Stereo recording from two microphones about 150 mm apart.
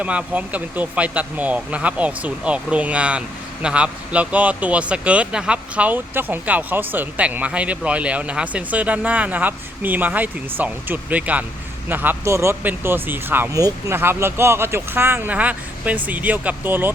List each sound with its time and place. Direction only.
0.0 s speech: 10° right (ahead or behind)